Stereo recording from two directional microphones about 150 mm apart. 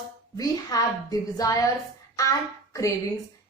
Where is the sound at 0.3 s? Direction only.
25° left (ahead or behind).